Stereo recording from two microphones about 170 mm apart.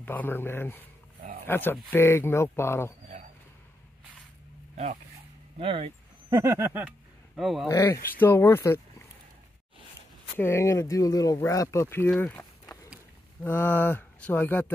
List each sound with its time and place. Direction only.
0.0 s speech: 10° left (ahead or behind)
5.6 s speech: 30° right (ahead or behind)
6.3 s a sound: 15° right (ahead or behind)
7.3 s speech: centre (ahead or behind)
7.6 s speech: 15° left (ahead or behind)
10.3 s speech: 15° left (ahead or behind)
12.1 s a sound: 10° left (ahead or behind)
13.4 s speech: 10° left (ahead or behind)